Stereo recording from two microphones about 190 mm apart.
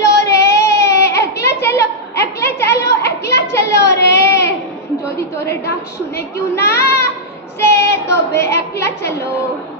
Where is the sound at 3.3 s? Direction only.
65° left (ahead or behind).